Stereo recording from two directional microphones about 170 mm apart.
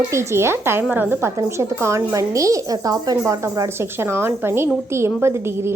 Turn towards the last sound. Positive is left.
turn(degrees=-15)  # may be behind; listen again after turning